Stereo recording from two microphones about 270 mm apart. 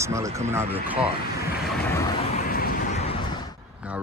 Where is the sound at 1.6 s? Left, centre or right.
Centre.